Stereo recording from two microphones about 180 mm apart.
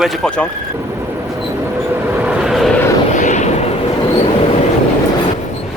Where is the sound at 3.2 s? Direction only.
40° left (ahead or behind).